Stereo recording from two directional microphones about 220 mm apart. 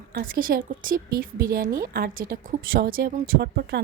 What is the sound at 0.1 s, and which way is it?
Speech, 45° right (ahead or behind).